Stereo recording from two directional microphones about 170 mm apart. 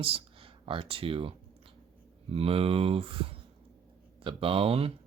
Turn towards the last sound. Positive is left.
turn(degrees=-35)  # may be behind; listen again after turning